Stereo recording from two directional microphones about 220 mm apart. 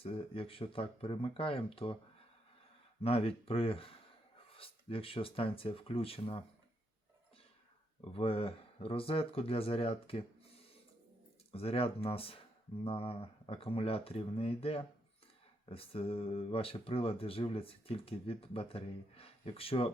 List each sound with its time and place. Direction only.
0.0 s speech: 25° left (ahead or behind)
3.0 s speech: 25° left (ahead or behind)
8.1 s speech: 25° left (ahead or behind)
11.5 s speech: 25° left (ahead or behind)